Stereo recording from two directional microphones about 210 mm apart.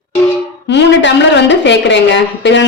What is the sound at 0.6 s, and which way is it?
A woman's voice, 60° left (ahead or behind).